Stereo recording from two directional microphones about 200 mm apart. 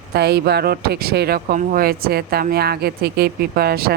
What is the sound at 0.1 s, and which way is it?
Speech, 55° right (ahead or behind).